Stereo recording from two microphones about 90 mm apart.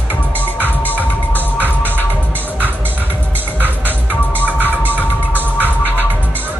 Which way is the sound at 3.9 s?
20° left (ahead or behind).